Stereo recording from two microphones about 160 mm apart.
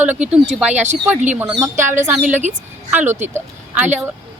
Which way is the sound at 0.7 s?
45° right (ahead or behind).